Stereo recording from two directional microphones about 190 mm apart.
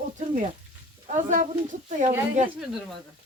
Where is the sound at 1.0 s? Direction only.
40° right (ahead or behind).